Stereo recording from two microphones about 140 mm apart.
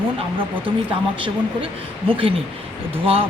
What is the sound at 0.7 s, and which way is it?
Speech, 35° right (ahead or behind).